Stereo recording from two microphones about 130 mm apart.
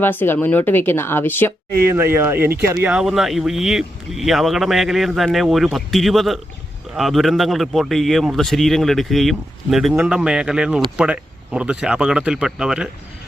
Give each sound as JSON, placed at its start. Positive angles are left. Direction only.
{"t": 0.0, "sound": "speech", "side_deg": 15}
{"t": 2.0, "sound": "speech", "side_deg": -20}
{"t": 2.9, "sound": "a man's voice", "side_deg": -5}